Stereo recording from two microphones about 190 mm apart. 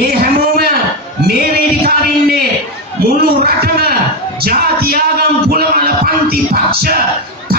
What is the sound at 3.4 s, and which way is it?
Speech, 55° right (ahead or behind).